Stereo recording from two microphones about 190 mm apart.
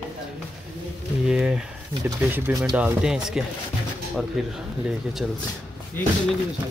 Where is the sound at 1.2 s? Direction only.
5° right (ahead or behind).